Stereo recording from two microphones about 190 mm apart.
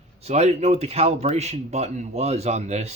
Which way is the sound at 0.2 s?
35° right (ahead or behind).